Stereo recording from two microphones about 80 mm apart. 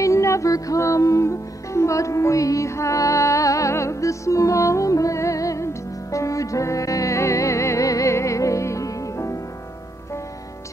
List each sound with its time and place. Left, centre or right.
0.0 s music: left